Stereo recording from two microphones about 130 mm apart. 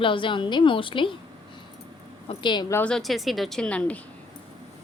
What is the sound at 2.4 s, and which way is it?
Speech, 35° left (ahead or behind).